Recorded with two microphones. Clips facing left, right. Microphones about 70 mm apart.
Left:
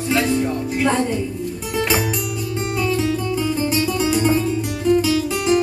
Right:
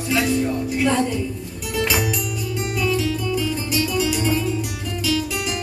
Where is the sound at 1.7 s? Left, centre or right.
Left.